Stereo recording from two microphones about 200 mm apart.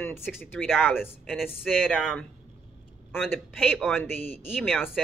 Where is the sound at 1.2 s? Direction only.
Centre (ahead or behind).